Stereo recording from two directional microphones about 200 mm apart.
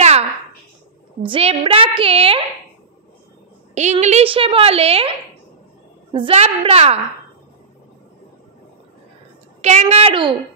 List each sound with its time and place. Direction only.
1.2 s a woman's voice: 30° right (ahead or behind)
3.7 s a woman's voice: 35° right (ahead or behind)
6.1 s a woman's voice: 30° right (ahead or behind)
9.6 s a woman's voice: 35° right (ahead or behind)